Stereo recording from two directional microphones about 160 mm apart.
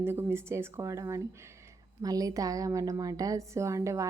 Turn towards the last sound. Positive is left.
turn(degrees=-20)  # may be behind; listen again after turning